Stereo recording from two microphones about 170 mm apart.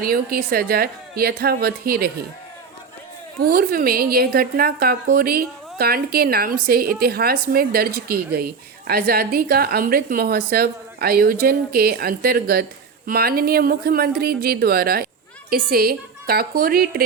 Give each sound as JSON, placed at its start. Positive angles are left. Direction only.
{"t": 0.0, "sound": "a woman's voice", "side_deg": -60}
{"t": 3.4, "sound": "a woman's voice", "side_deg": -60}